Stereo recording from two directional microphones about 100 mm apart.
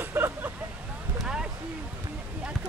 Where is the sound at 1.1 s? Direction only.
10° right (ahead or behind).